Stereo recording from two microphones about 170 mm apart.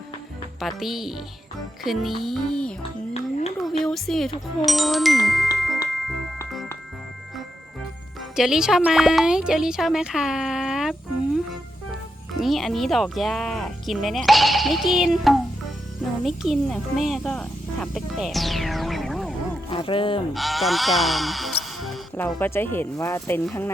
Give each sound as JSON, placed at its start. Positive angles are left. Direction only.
{"t": 0.6, "sound": "speech", "side_deg": 0}
{"t": 3.2, "sound": "a sound", "side_deg": 35}
{"t": 3.6, "sound": "speech", "side_deg": 0}
{"t": 5.5, "sound": "music", "side_deg": 0}
{"t": 8.4, "sound": "speech", "side_deg": -5}
{"t": 12.4, "sound": "speech", "side_deg": 0}
{"t": 19.7, "sound": "speech", "side_deg": 30}
{"t": 20.3, "sound": "speech", "side_deg": 0}
{"t": 22.4, "sound": "speech", "side_deg": 10}